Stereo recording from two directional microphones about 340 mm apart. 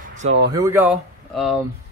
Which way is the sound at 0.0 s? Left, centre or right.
Right.